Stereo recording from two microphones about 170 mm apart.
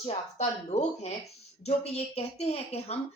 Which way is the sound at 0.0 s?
40° left (ahead or behind).